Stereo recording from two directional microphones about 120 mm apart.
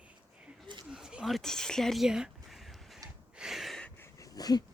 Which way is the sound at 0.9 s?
5° right (ahead or behind).